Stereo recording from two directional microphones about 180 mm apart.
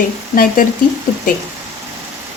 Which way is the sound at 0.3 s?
50° left (ahead or behind).